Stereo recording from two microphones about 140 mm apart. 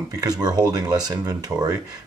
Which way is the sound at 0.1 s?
25° right (ahead or behind).